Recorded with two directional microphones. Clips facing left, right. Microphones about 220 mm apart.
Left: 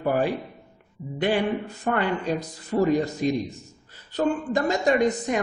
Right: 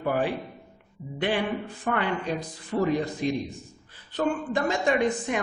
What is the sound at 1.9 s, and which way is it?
A man's voice, 45° left (ahead or behind).